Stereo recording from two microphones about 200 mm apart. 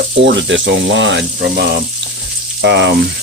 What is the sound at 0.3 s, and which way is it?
Speech, 65° right (ahead or behind).